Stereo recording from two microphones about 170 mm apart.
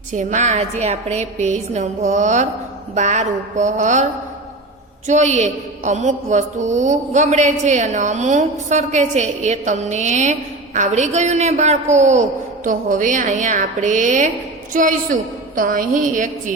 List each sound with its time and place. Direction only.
0.1 s a woman's voice: 45° right (ahead or behind)
5.0 s a woman's voice: 45° right (ahead or behind)